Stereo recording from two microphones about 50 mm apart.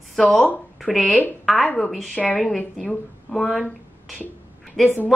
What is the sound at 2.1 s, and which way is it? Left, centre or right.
Speech, left.